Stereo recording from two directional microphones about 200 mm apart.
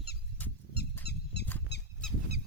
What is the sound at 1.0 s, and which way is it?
Squeak, 55° left (ahead or behind).